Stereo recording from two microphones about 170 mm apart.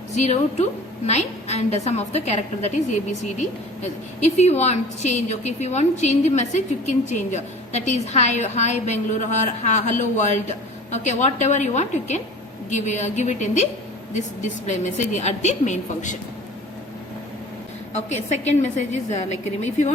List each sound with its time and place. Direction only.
0.2 s a woman's voice: 40° left (ahead or behind)
17.9 s a woman's voice: 40° left (ahead or behind)